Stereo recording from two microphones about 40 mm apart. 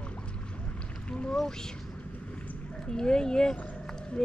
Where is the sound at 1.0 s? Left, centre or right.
Left.